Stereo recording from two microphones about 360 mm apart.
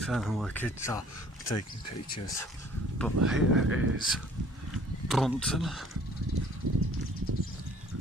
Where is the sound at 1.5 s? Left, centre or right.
Left.